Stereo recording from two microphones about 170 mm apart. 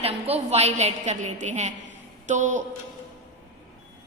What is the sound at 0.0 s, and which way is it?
A woman's voice, 40° right (ahead or behind).